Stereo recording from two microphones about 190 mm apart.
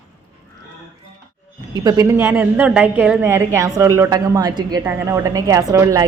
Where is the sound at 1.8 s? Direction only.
20° right (ahead or behind).